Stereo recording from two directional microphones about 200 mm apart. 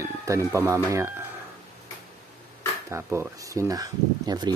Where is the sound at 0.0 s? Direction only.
15° right (ahead or behind).